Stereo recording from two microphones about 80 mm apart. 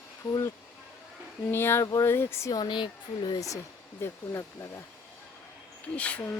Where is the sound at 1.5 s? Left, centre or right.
Left.